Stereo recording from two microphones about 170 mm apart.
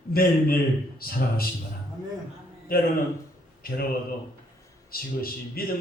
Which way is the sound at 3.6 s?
60° left (ahead or behind).